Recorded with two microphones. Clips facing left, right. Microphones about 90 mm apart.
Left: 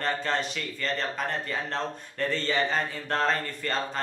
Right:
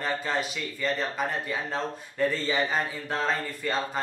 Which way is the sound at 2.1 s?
5° right (ahead or behind).